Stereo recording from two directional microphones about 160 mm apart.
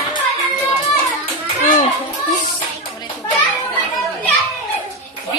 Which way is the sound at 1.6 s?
50° left (ahead or behind).